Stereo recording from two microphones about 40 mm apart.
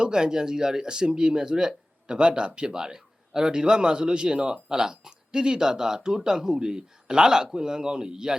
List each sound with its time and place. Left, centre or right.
0.0 s speech: centre